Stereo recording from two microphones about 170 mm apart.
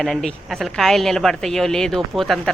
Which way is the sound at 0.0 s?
Centre (ahead or behind).